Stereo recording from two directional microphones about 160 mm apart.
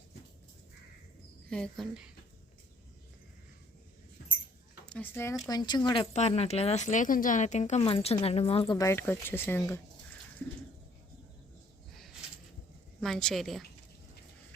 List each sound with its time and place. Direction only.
1.5 s a woman's voice: 5° left (ahead or behind)
4.9 s speech: 10° left (ahead or behind); by 6.1 s 30° left (ahead or behind)
6.1 s speech: 40° left (ahead or behind)
8.9 s speech: 15° left (ahead or behind)
13.0 s a woman's voice: 5° left (ahead or behind)